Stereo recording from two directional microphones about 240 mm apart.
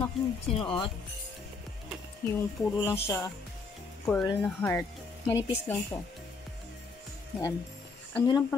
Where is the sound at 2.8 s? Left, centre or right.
Centre.